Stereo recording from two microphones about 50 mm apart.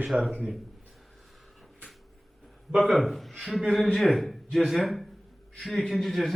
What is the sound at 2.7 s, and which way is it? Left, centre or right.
A man's voice, centre.